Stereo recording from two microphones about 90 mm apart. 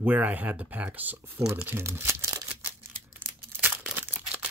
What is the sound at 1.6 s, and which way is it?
Crumpling, 25° right (ahead or behind).